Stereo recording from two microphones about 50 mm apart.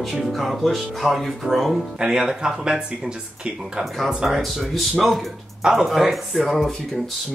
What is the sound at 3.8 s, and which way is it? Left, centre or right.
Speech, centre.